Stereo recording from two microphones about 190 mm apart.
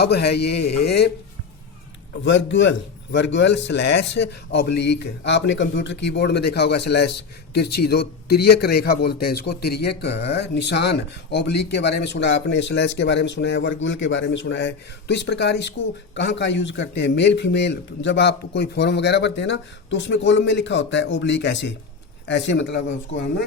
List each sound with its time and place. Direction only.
0.0 s a man's voice: 60° left (ahead or behind)
2.2 s a man's voice: 75° left (ahead or behind)